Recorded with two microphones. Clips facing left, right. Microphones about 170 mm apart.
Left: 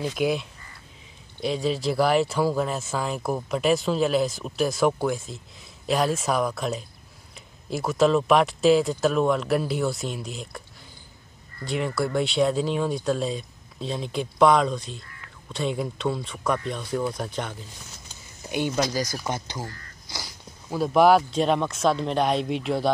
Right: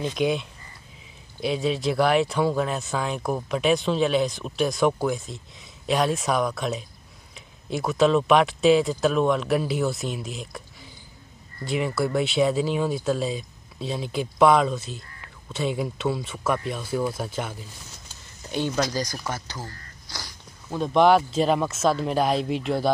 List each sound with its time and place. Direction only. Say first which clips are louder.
0.0 s speech: right 1 dB; 5° left (ahead or behind)
11.6 s speech: right 1 dB; centre (ahead or behind)
18.4 s a sound: even; 10° left (ahead or behind)
19.2 s speech: left 2 dB; 20° left (ahead or behind); by 22.8 s centre (ahead or behind)